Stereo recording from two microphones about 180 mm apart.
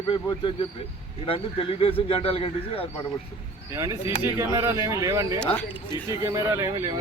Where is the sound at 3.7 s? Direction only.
15° right (ahead or behind).